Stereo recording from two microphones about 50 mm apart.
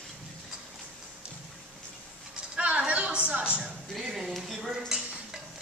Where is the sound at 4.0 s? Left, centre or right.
Centre.